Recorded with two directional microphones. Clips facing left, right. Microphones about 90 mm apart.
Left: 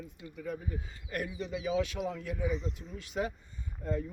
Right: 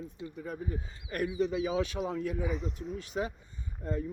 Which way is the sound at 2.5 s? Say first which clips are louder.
Right 2 dB; 60° right (ahead or behind).